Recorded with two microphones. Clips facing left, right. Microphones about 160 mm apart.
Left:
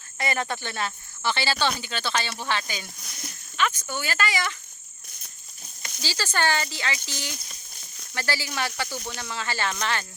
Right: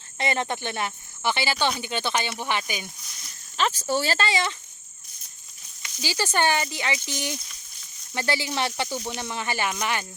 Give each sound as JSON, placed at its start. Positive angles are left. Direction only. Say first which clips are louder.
{"t": 0.2, "sound": "speech", "louder": "right 2 dB", "side_deg": -20}
{"t": 3.6, "sound": "speech", "louder": "right 3 dB", "side_deg": -35}
{"t": 6.0, "sound": "speech", "louder": "right 3 dB", "side_deg": -20}